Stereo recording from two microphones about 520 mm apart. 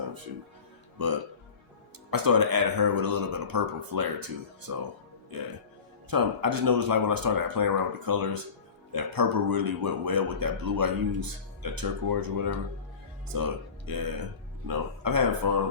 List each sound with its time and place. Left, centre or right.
2.0 s speech: right
13.9 s speech: right